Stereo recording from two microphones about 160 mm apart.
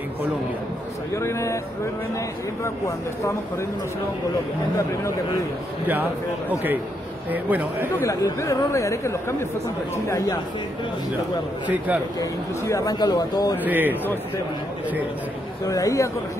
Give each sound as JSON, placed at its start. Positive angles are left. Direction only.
{"t": 1.1, "sound": "a man's voice", "side_deg": 20}
{"t": 7.2, "sound": "speech", "side_deg": -10}
{"t": 8.0, "sound": "speech", "side_deg": 20}
{"t": 11.6, "sound": "speech", "side_deg": -10}
{"t": 12.2, "sound": "speech", "side_deg": 20}
{"t": 13.7, "sound": "speech", "side_deg": -10}
{"t": 15.6, "sound": "speech", "side_deg": 20}